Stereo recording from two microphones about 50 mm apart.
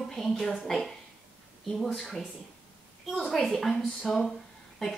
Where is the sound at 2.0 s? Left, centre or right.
Centre.